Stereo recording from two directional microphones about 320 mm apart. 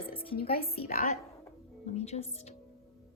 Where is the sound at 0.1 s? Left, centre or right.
Centre.